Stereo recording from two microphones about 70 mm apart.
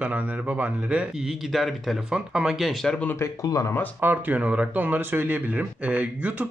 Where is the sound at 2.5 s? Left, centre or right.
Centre.